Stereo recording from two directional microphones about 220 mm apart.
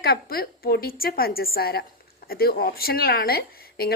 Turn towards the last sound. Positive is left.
turn(degrees=45)  # may be behind; listen again after turning